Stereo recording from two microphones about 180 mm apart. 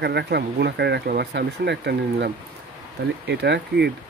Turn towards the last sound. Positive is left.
turn(degrees=-65)  # may be behind; listen again after turning